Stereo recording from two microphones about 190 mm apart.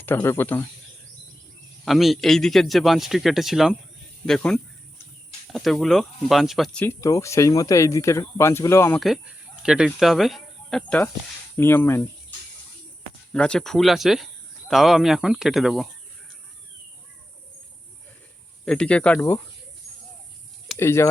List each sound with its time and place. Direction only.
0.0 s speech: 10° left (ahead or behind)
1.8 s speech: centre (ahead or behind)
6.8 s speech: 15° left (ahead or behind)
9.0 s speech: centre (ahead or behind)
13.3 s speech: 5° left (ahead or behind)
18.6 s speech: 5° left (ahead or behind)
20.7 s speech: 15° left (ahead or behind)